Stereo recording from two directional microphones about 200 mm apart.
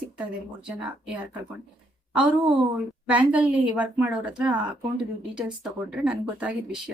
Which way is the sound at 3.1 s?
5° right (ahead or behind).